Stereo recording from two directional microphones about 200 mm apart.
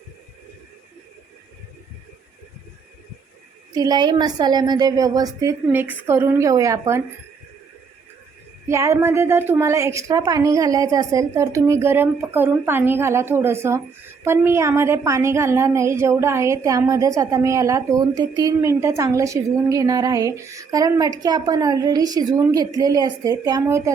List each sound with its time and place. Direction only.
3.8 s a woman's voice: 20° right (ahead or behind)
8.6 s a woman's voice: 15° right (ahead or behind)